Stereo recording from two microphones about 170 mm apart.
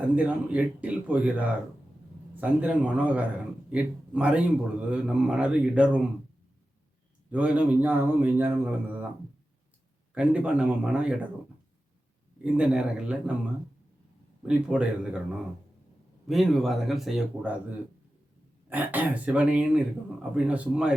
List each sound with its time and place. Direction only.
0.2 s a man's voice: 10° right (ahead or behind)
7.3 s a man's voice: 10° right (ahead or behind)
10.2 s a man's voice: 5° right (ahead or behind)
12.4 s a man's voice: 5° right (ahead or behind)
14.4 s speech: 5° right (ahead or behind)
16.2 s a man's voice: centre (ahead or behind)